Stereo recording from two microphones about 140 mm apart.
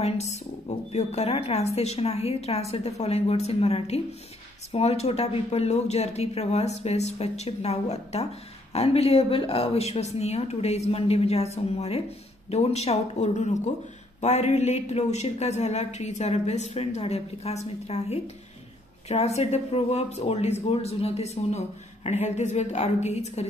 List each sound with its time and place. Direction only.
0.0 s speech: 50° left (ahead or behind)